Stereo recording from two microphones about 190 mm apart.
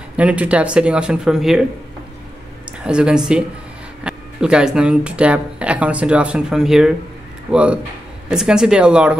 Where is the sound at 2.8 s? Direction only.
5° right (ahead or behind).